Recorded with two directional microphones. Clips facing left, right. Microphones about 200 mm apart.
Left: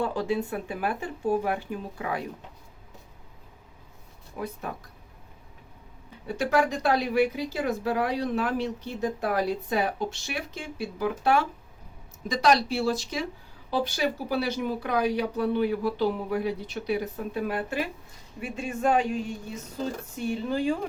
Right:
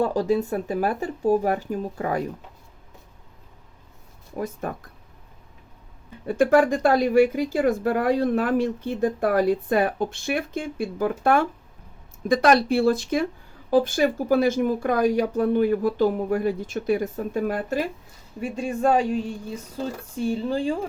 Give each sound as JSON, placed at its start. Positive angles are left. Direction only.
{"t": 0.0, "sound": "speech", "side_deg": -40}
{"t": 4.4, "sound": "speech", "side_deg": -45}
{"t": 6.2, "sound": "speech", "side_deg": -50}